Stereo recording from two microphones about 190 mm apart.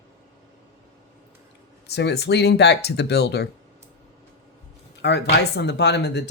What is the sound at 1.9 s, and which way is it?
Speech, 60° left (ahead or behind).